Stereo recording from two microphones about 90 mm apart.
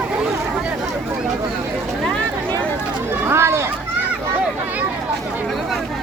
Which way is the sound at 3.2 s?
30° right (ahead or behind).